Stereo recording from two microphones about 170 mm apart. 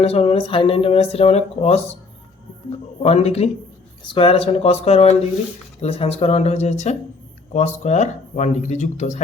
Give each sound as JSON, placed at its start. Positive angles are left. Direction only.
{"t": 0.0, "sound": "speech", "side_deg": 35}
{"t": 3.0, "sound": "speech", "side_deg": 40}